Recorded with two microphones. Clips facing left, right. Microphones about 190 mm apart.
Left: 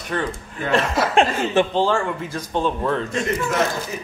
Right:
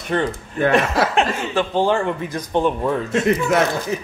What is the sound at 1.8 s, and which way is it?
Speech, 20° right (ahead or behind).